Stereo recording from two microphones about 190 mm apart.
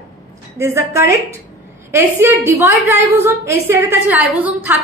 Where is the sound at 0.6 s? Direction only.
15° right (ahead or behind).